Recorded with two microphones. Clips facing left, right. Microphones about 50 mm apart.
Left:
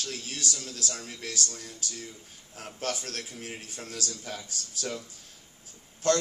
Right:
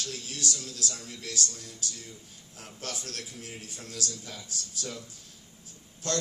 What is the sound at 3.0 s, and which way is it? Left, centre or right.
A man's voice, left.